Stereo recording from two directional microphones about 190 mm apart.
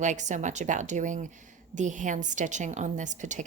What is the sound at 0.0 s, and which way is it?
A woman's voice, 40° right (ahead or behind).